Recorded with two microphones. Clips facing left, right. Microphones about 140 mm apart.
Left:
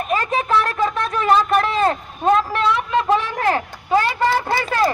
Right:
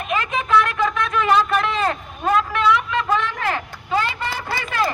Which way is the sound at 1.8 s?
30° left (ahead or behind).